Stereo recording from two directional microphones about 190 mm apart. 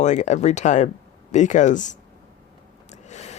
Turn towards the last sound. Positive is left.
turn(degrees=35)  # may be behind; listen again after turning